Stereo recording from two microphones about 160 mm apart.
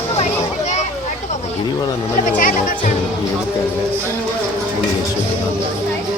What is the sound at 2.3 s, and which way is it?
Speech, 60° left (ahead or behind).